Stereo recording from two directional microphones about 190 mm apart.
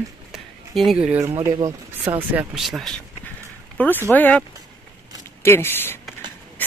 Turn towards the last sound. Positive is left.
turn(degrees=10)  # may be behind; listen again after turning